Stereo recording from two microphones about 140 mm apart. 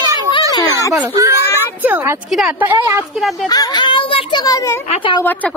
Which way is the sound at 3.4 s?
30° left (ahead or behind).